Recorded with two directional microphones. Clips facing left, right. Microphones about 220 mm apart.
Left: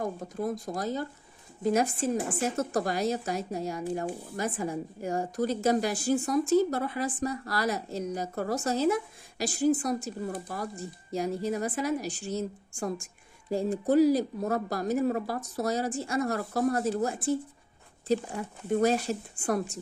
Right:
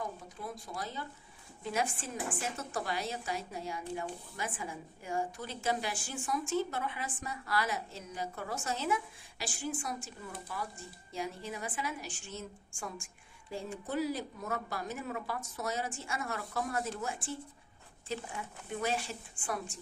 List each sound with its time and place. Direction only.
0.0 s a woman's voice: 45° left (ahead or behind)